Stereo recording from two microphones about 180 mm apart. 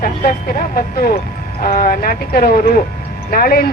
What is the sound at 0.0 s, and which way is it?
Speech, 50° left (ahead or behind).